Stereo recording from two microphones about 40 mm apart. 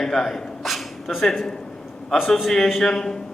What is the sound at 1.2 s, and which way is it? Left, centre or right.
Speech, centre.